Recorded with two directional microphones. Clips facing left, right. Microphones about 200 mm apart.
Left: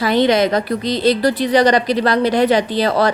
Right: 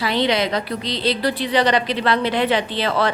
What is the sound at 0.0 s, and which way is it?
A woman's voice, 45° left (ahead or behind).